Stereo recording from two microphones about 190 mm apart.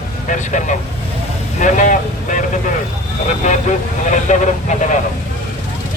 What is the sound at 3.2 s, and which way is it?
Speech, 40° left (ahead or behind).